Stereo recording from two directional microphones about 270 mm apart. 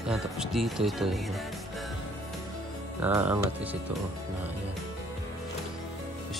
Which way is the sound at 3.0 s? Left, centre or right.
Centre.